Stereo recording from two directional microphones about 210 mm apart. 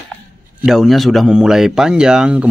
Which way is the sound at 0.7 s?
Centre (ahead or behind).